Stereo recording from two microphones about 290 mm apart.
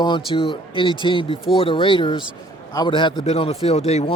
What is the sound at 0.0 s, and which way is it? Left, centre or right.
A man's voice, centre.